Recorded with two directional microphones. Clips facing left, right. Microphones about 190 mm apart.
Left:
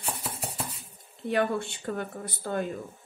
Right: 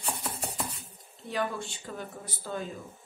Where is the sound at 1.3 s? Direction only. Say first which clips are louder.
Left 6 dB; 60° left (ahead or behind).